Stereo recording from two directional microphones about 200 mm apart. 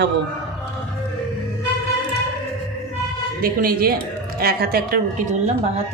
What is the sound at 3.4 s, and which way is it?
Speech, 45° right (ahead or behind).